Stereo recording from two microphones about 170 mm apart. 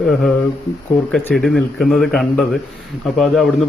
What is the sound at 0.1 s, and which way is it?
A man's voice, centre (ahead or behind).